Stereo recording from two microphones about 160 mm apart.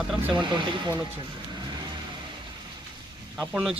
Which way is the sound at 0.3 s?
30° right (ahead or behind).